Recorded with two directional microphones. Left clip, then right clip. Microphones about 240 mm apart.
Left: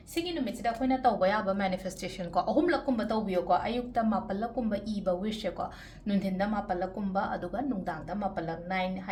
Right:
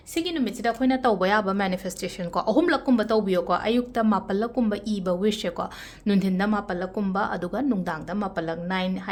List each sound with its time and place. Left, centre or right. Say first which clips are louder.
0.1 s speech: right 6 dB; right